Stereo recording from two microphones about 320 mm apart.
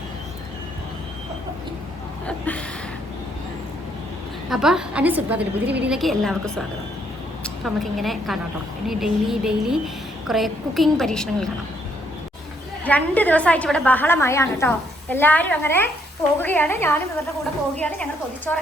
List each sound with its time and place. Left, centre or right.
4.4 s a woman's voice: centre
5.4 s a woman's voice: right
5.8 s a woman's voice: centre
12.8 s a woman's voice: centre